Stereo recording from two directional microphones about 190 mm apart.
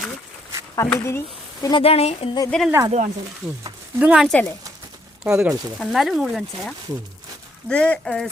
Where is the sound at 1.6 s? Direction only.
25° left (ahead or behind).